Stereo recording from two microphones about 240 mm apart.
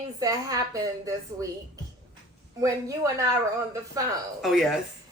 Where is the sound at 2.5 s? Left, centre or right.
Centre.